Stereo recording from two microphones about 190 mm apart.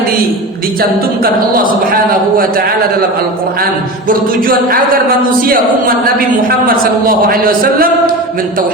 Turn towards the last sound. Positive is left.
turn(degrees=-50)  # may be behind; listen again after turning